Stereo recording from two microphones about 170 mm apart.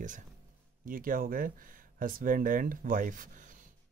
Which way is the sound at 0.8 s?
55° right (ahead or behind).